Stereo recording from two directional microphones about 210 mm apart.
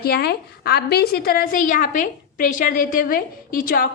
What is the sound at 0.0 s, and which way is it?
A woman's voice, 50° left (ahead or behind).